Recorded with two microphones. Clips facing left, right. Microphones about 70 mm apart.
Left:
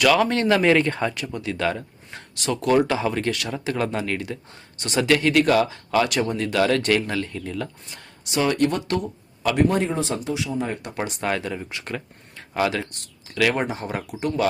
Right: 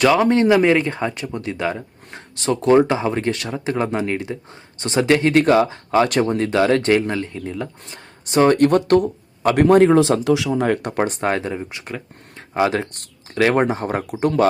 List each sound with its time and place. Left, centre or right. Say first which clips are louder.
0.0 s speech: right 4 dB; right
8.3 s a man's voice: right 7 dB; right
9.9 s speech: right 11 dB; right
10.8 s speech: right 6 dB; right
12.9 s speech: right 5 dB; right